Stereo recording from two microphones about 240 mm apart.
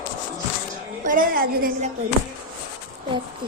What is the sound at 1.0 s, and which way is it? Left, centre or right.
Speech, right.